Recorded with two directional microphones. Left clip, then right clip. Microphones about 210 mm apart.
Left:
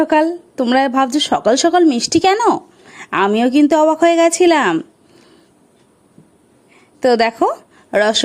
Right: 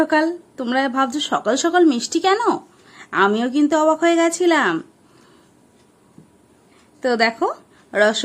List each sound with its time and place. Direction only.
0.0 s speech: 30° left (ahead or behind)
7.0 s a woman's voice: 35° left (ahead or behind)